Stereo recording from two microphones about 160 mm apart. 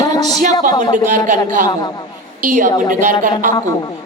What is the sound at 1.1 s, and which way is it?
A woman's voice, 50° right (ahead or behind).